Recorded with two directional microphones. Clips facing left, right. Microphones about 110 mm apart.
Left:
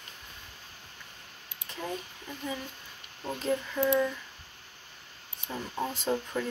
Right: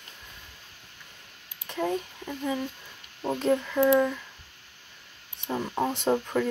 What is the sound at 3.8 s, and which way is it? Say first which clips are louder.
Speech: right 5 dB; 45° right (ahead or behind).